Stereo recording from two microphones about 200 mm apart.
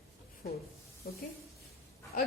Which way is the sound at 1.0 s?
50° left (ahead or behind).